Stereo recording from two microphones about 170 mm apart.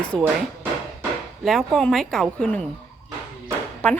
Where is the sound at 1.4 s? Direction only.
Centre (ahead or behind).